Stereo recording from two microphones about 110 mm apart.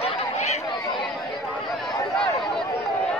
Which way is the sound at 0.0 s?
80° left.